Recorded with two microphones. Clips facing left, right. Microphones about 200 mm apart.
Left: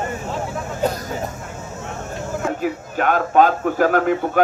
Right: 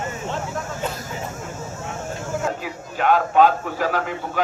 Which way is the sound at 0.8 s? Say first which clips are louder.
Left 9 dB; 40° left (ahead or behind).